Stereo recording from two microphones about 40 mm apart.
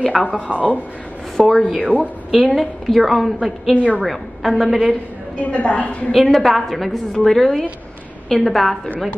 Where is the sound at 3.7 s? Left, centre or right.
Right.